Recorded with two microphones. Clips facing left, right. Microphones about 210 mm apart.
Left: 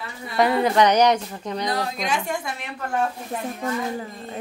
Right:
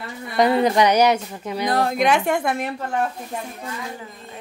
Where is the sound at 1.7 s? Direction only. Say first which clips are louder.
Right 9 dB; 55° right (ahead or behind).